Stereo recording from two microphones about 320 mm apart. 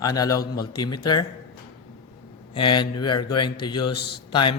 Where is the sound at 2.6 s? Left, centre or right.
Centre.